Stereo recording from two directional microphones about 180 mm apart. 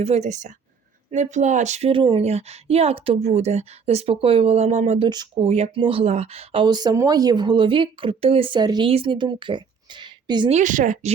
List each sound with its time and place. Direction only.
0.0 s a woman's voice: 35° right (ahead or behind)
5.0 s speech: 25° right (ahead or behind)
10.5 s speech: 45° right (ahead or behind)